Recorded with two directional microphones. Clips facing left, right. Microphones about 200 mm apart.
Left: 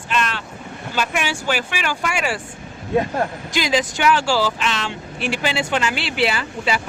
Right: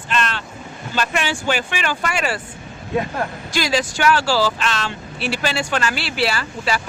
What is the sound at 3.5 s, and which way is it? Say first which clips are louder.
Speech: right 2 dB; 20° left (ahead or behind).